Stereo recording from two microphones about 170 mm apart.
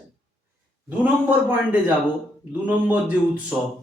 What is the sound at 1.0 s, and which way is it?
Speech, 10° right (ahead or behind).